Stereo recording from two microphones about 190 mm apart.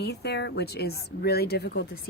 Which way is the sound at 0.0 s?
60° left (ahead or behind).